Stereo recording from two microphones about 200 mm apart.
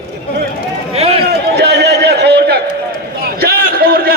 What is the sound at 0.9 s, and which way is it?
Speech, 30° right (ahead or behind).